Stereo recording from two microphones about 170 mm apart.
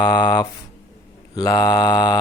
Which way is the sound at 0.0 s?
25° left (ahead or behind).